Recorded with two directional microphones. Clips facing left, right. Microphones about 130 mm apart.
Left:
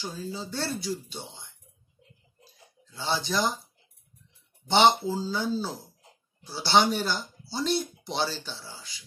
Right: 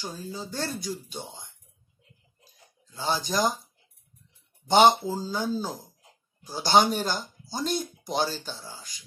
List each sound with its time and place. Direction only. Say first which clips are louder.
0.1 s speech: left 1 dB; 15° right (ahead or behind)
1.0 s speech: right 2 dB; 45° right (ahead or behind)
3.0 s speech: right 2 dB; 45° right (ahead or behind)
4.6 s speech: right 2 dB; 45° right (ahead or behind)